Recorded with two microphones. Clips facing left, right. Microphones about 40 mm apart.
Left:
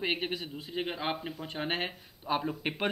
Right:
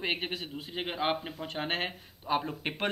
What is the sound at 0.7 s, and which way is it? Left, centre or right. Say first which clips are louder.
Speech: right 2 dB; right.